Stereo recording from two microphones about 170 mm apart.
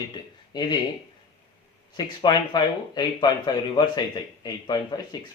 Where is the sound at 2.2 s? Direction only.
25° left (ahead or behind).